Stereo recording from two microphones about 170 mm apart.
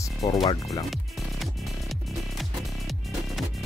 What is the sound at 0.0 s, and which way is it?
Speech, 20° left (ahead or behind).